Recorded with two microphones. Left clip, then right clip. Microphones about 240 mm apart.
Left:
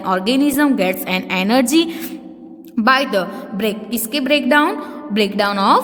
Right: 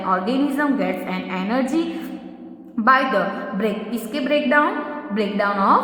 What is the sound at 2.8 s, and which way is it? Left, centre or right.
A woman's voice, left.